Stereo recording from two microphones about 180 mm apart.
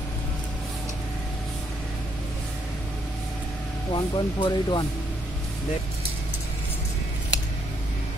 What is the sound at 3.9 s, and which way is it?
Speech, 25° left (ahead or behind).